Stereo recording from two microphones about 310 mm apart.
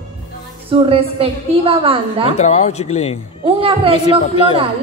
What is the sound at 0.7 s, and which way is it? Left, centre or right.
A woman's voice, centre.